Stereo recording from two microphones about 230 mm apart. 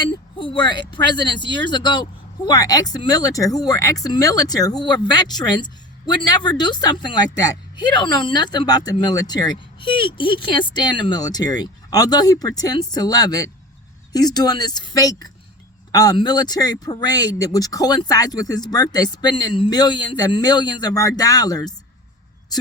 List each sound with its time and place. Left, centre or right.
0.0 s speech: centre